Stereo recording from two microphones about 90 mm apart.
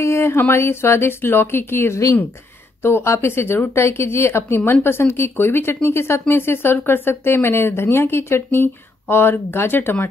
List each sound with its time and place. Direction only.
0.0 s speech: 25° left (ahead or behind)